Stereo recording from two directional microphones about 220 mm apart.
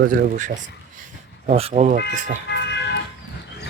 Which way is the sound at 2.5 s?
50° left (ahead or behind).